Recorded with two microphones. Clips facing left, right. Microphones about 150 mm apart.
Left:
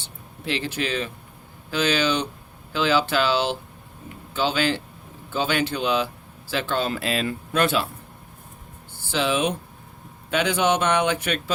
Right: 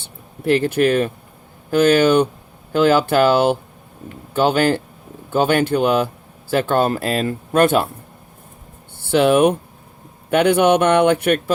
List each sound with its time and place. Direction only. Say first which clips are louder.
0.0 s speech: right 10 dB; 50° right (ahead or behind)
9.0 s a man's voice: right 10 dB; 60° right (ahead or behind)